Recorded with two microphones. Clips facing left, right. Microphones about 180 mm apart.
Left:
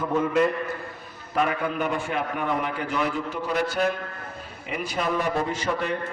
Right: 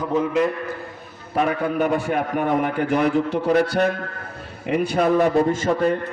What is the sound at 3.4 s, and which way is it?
Music, 65° right (ahead or behind).